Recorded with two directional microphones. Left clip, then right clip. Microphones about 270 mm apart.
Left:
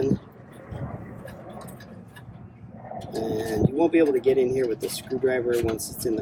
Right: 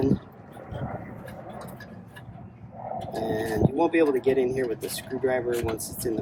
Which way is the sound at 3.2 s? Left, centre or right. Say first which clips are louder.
Left 1 dB; centre.